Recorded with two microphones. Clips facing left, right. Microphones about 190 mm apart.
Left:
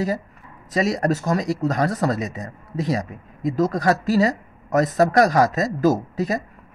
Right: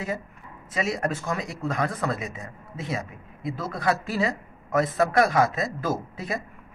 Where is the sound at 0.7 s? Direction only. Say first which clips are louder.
Left 6 dB; 35° left (ahead or behind).